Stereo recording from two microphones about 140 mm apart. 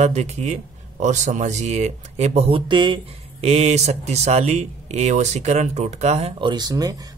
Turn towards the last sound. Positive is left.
turn(degrees=-30)  # may be behind; listen again after turning